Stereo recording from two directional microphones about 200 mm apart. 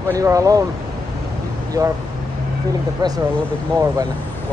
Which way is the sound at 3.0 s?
20° right (ahead or behind).